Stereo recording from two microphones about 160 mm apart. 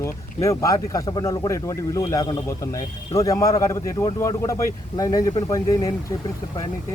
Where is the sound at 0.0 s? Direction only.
20° left (ahead or behind).